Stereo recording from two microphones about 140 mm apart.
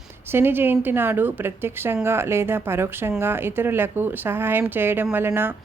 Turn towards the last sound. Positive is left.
turn(degrees=-15)  # may be behind; listen again after turning